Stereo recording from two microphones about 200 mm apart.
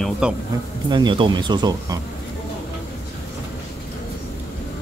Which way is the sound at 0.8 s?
20° right (ahead or behind).